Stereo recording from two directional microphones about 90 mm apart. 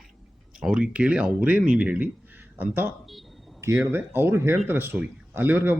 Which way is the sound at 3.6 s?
30° right (ahead or behind).